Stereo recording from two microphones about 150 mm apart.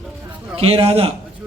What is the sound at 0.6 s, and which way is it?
Speech, 40° right (ahead or behind).